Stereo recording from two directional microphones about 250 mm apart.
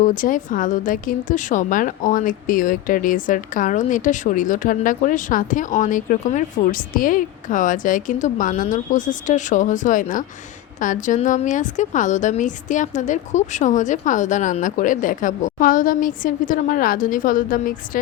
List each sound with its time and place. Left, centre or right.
0.0 s a woman's voice: left